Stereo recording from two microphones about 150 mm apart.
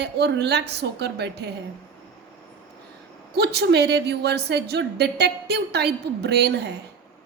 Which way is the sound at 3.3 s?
90° right.